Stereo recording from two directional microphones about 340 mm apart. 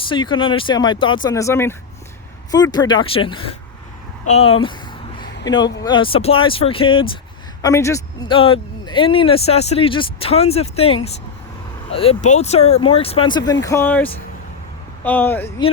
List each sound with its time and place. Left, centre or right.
0.1 s speech: centre
4.3 s a sound: centre
5.5 s speech: centre